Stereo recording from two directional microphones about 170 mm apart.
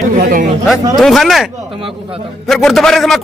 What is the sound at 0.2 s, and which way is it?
Speech, 55° right (ahead or behind).